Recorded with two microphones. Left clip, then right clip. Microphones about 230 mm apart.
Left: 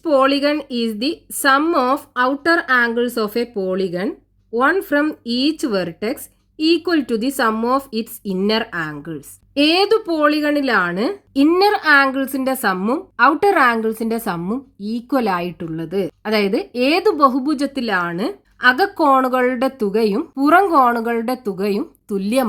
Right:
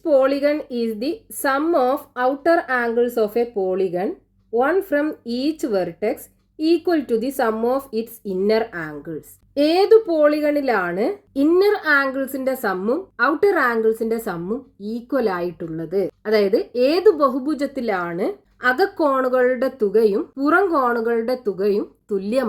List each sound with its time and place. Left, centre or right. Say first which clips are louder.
0.0 s a woman's voice: left 1 dB; left